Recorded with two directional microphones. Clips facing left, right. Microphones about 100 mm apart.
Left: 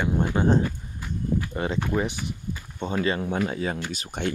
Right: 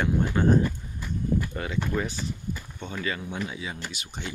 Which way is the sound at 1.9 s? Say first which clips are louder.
Left 3 dB; 15° left (ahead or behind).